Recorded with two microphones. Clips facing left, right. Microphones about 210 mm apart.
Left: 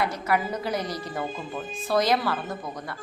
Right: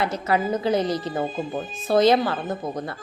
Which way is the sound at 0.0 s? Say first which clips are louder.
Right 3 dB; 25° right (ahead or behind).